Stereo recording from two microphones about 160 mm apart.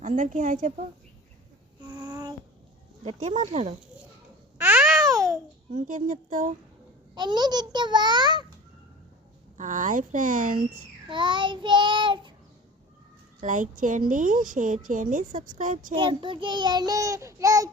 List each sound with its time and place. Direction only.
0.0 s speech: 55° right (ahead or behind)
2.0 s a sound: 25° right (ahead or behind)
3.0 s speech: 45° right (ahead or behind)
4.5 s babbling: 10° right (ahead or behind)
5.7 s a woman's voice: 55° right (ahead or behind)
7.2 s child singing: 25° right (ahead or behind)
9.6 s a woman's voice: 55° right (ahead or behind)
11.1 s child singing: 30° right (ahead or behind)
13.4 s a woman's voice: 55° right (ahead or behind)
16.0 s child singing: 30° right (ahead or behind)